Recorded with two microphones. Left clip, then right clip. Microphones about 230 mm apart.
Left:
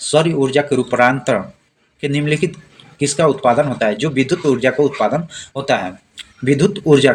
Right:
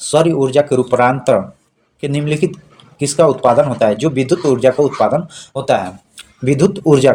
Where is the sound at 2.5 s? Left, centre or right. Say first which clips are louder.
Right 1 dB; right.